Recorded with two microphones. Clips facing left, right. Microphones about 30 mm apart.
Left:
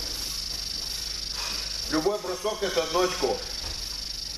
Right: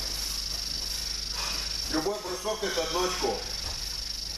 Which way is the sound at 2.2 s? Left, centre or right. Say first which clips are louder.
Left 3 dB; centre.